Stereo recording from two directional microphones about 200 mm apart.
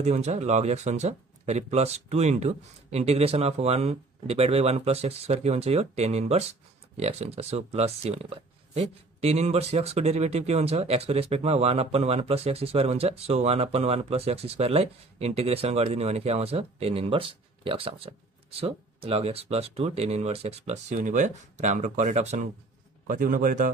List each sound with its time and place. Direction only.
0.0 s speech: 35° right (ahead or behind)